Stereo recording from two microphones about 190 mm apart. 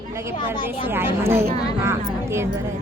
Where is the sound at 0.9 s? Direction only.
10° right (ahead or behind).